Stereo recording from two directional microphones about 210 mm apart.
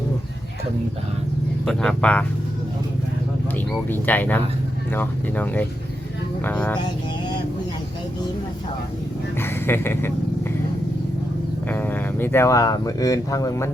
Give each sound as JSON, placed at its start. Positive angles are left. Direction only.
{"t": 1.6, "sound": "speech", "side_deg": 5}
{"t": 3.8, "sound": "speech", "side_deg": 10}
{"t": 9.4, "sound": "a sound", "side_deg": 10}
{"t": 11.7, "sound": "speech", "side_deg": 10}